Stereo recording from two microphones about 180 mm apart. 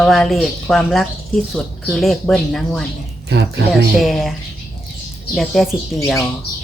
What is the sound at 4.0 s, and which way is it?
Speech, centre (ahead or behind).